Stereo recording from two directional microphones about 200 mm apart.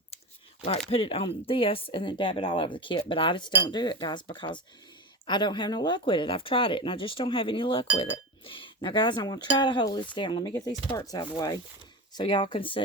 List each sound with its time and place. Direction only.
0.9 s speech: 30° left (ahead or behind)